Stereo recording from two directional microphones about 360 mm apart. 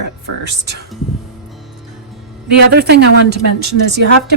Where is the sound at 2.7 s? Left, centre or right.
Right.